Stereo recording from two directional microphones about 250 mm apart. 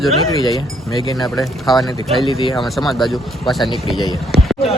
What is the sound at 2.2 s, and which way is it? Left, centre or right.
Speech, left.